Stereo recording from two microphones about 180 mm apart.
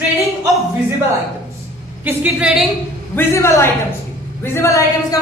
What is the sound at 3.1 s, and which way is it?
A woman's voice, 15° left (ahead or behind).